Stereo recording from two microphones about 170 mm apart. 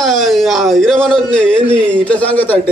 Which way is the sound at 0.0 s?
Centre (ahead or behind).